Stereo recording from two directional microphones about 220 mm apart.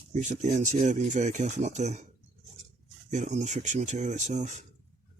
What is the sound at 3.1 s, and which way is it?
Speech, 30° right (ahead or behind).